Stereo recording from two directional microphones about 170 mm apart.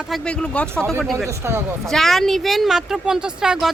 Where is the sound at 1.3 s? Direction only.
15° right (ahead or behind).